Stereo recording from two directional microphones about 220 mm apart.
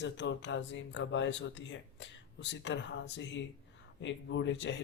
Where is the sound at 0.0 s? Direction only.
55° left (ahead or behind).